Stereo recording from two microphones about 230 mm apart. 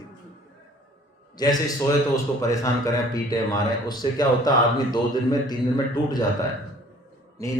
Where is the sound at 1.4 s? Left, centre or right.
Centre.